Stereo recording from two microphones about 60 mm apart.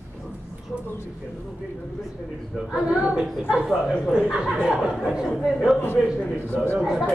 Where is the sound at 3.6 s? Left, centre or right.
Centre.